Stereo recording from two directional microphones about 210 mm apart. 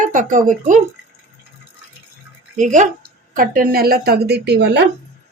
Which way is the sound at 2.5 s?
35° right (ahead or behind).